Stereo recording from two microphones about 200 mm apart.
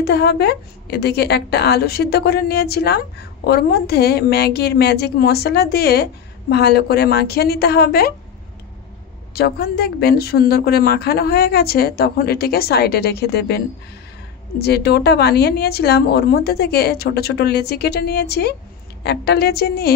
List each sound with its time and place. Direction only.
0.0 s a woman's voice: 55° left (ahead or behind)
9.3 s a woman's voice: 50° left (ahead or behind)
14.6 s a woman's voice: 55° left (ahead or behind)